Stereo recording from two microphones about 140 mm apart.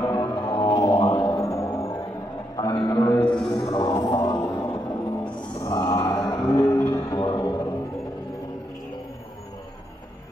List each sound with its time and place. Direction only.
0.0 s music: 25° left (ahead or behind)